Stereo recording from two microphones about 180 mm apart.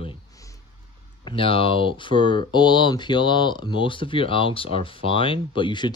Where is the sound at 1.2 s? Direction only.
30° left (ahead or behind).